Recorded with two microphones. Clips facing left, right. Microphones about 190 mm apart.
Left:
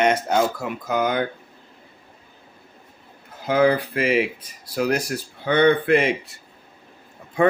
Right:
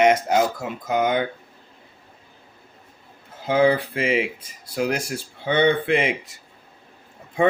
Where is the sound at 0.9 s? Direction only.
20° right (ahead or behind).